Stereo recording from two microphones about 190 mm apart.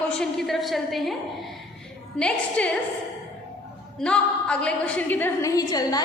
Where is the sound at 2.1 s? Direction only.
5° left (ahead or behind).